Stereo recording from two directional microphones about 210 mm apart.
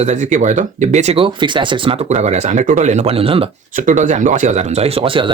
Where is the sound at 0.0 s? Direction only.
35° right (ahead or behind).